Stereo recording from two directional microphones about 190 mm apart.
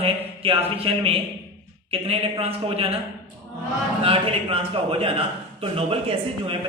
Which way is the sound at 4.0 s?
30° right (ahead or behind).